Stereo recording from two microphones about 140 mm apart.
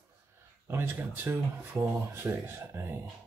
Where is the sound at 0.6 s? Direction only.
15° right (ahead or behind).